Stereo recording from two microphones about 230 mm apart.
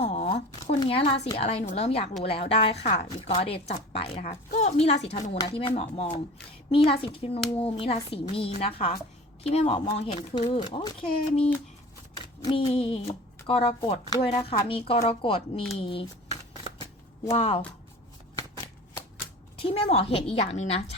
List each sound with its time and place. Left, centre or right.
0.0 s speech: left
12.2 s a sound: left
13.5 s speech: left
19.6 s speech: left